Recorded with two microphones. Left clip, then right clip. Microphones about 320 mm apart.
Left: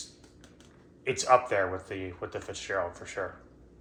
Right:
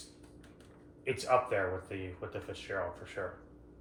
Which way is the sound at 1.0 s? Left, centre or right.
Left.